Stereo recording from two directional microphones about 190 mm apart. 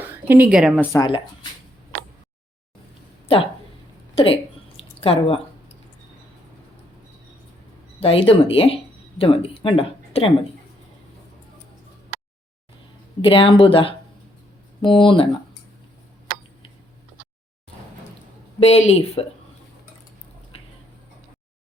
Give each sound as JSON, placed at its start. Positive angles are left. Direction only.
{"t": 0.0, "sound": "a sound", "side_deg": -10}
{"t": 0.8, "sound": "speech", "side_deg": 20}
{"t": 4.1, "sound": "a woman's voice", "side_deg": 30}
{"t": 4.8, "sound": "drip", "side_deg": 30}
{"t": 7.9, "sound": "speech", "side_deg": 30}
{"t": 13.2, "sound": "speech", "side_deg": 25}
{"t": 18.6, "sound": "speech", "side_deg": 35}